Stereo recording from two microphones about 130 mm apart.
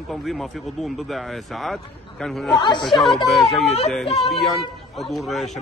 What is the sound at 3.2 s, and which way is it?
A man's voice, centre (ahead or behind).